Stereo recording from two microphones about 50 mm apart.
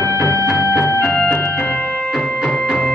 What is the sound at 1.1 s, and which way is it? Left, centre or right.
Music, left.